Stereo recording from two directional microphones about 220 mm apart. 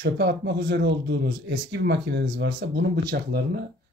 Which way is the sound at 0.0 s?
50° right (ahead or behind).